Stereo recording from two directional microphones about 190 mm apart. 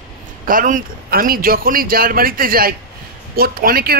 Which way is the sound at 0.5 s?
45° right (ahead or behind).